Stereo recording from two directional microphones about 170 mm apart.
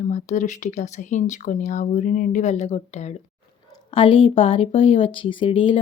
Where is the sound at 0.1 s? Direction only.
45° left (ahead or behind).